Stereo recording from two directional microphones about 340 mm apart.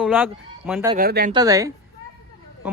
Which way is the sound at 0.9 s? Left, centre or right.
Right.